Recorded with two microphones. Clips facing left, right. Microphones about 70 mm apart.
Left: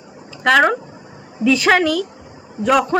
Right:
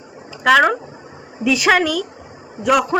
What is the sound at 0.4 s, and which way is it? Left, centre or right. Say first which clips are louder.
A man's voice: right 1 dB; centre.